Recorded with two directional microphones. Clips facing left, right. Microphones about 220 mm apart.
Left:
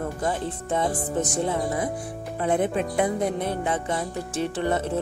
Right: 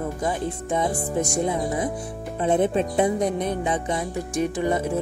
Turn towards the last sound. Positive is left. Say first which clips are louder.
# right 2 dB
turn(degrees=-10)  # may be behind; listen again after turning